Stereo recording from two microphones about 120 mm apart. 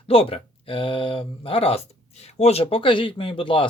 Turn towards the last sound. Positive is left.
turn(degrees=45)  # may be behind; listen again after turning